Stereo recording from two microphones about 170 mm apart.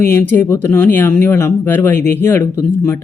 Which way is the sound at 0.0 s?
10° left (ahead or behind).